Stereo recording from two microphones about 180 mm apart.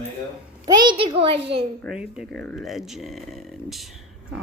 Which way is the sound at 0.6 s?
25° right (ahead or behind).